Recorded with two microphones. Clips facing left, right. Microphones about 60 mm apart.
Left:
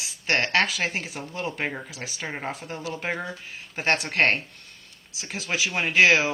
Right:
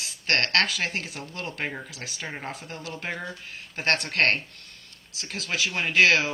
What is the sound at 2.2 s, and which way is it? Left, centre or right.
Speech, centre.